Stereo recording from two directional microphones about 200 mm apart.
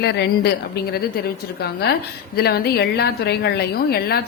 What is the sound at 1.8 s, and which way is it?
A woman's voice, 50° left (ahead or behind).